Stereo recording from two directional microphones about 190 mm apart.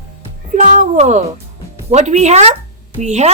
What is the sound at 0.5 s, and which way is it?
Music, 45° right (ahead or behind).